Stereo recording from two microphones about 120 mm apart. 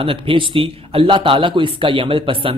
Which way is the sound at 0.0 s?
45° right (ahead or behind).